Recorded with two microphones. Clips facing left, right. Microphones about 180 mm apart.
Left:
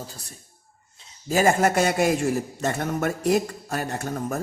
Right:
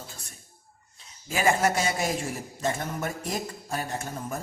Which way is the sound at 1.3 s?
45° left (ahead or behind).